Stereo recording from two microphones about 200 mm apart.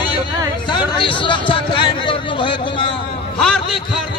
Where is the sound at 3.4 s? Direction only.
5° left (ahead or behind).